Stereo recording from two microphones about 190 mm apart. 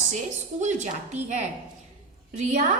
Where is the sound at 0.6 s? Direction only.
40° right (ahead or behind).